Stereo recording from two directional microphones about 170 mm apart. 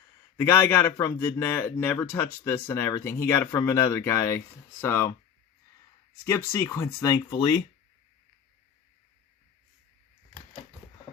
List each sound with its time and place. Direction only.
0.4 s speech: 15° left (ahead or behind)
6.2 s speech: 15° left (ahead or behind)